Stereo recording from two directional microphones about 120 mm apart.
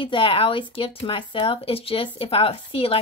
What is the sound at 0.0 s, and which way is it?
Speech, 45° left (ahead or behind).